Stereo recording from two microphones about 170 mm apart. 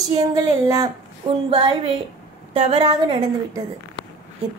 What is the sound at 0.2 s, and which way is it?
Speech, 20° right (ahead or behind).